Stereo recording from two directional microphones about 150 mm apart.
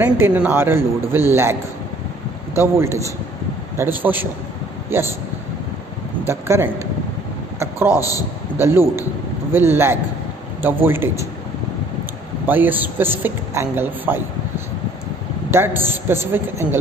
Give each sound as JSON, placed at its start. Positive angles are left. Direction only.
{"t": 0.0, "sound": "speech", "side_deg": -10}
{"t": 6.2, "sound": "speech", "side_deg": -15}
{"t": 7.5, "sound": "a sound", "side_deg": -20}
{"t": 7.9, "sound": "a man's voice", "side_deg": 20}
{"t": 8.5, "sound": "speech", "side_deg": -15}
{"t": 12.4, "sound": "speech", "side_deg": -10}
{"t": 15.5, "sound": "speech", "side_deg": -15}